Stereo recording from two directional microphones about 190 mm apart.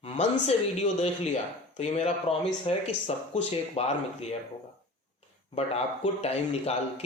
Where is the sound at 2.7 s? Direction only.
35° left (ahead or behind).